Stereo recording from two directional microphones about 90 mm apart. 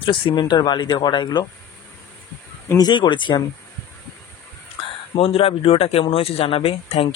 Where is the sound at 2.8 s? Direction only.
60° left (ahead or behind).